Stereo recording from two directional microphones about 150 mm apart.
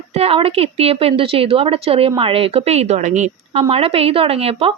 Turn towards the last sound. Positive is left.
turn(degrees=-40)  # may be behind; listen again after turning